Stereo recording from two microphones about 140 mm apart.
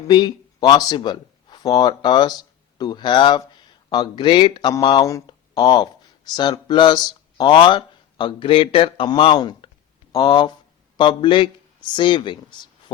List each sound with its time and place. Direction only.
0.1 s speech: 30° left (ahead or behind)